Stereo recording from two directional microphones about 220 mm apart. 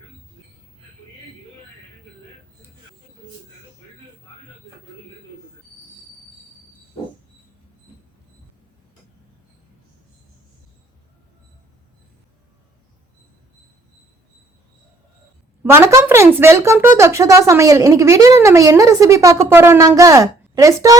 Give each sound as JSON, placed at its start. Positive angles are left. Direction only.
{"t": 15.7, "sound": "speech", "side_deg": -10}